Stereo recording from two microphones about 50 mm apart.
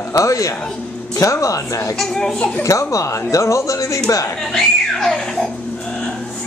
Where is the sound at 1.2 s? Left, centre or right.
Left.